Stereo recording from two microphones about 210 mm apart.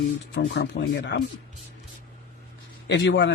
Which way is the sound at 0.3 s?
50° left (ahead or behind).